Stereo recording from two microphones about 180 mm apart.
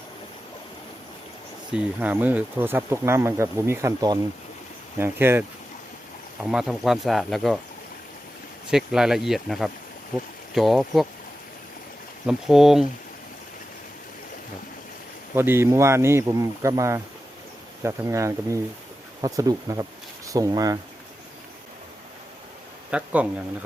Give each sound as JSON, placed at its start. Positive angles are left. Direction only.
{"t": 1.7, "sound": "speech", "side_deg": -10}
{"t": 8.7, "sound": "speech", "side_deg": -5}
{"t": 12.2, "sound": "speech", "side_deg": 0}
{"t": 15.4, "sound": "speech", "side_deg": -15}
{"t": 22.9, "sound": "speech", "side_deg": -5}